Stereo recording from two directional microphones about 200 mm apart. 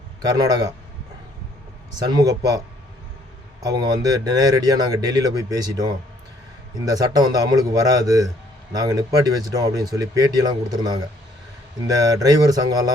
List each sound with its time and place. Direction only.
0.2 s speech: 20° right (ahead or behind)
2.0 s speech: 20° right (ahead or behind)
3.6 s speech: 20° right (ahead or behind)
6.9 s speech: 20° right (ahead or behind)
12.1 s speech: 20° right (ahead or behind)